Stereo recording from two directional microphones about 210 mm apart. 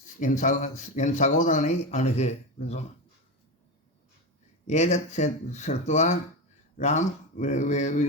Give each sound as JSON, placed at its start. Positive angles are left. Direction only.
{"t": 0.0, "sound": "speech", "side_deg": 35}
{"t": 4.6, "sound": "speech", "side_deg": 30}